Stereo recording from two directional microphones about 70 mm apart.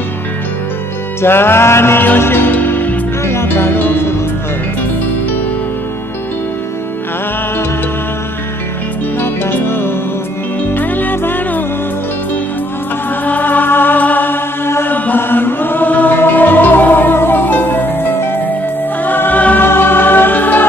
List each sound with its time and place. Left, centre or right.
1.2 s music: left
9.2 s music: left
13.2 s chant: left
19.0 s music: left